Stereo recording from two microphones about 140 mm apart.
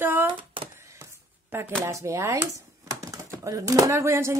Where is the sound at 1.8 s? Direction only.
20° right (ahead or behind).